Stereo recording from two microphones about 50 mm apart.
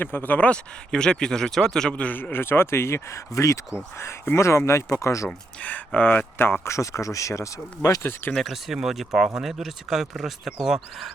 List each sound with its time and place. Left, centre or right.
0.0 s speech: left
0.3 s a man's voice: left
0.9 s speech: centre
1.9 s a man's voice: left
2.3 s speech: left
4.4 s speech: left
5.6 s speech: left
6.1 s speech: left
6.7 s speech: left
8.3 s speech: centre